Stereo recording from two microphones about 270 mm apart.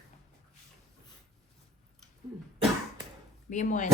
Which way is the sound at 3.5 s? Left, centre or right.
Left.